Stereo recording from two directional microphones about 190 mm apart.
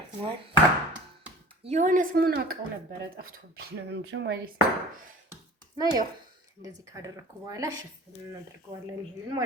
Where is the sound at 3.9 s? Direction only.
65° right (ahead or behind).